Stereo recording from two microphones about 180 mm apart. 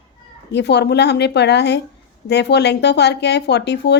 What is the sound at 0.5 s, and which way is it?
Speech, 70° left (ahead or behind).